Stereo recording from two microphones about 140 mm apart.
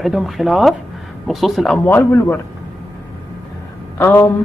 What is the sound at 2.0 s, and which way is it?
Speech, 15° left (ahead or behind).